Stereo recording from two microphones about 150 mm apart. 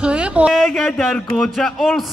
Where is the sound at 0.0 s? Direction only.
5° right (ahead or behind).